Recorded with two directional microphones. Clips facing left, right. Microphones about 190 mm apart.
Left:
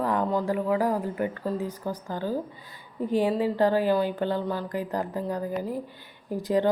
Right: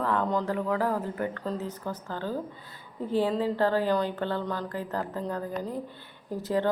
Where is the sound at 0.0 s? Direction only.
15° left (ahead or behind).